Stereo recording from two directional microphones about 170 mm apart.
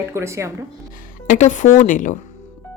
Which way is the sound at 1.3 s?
45° left (ahead or behind).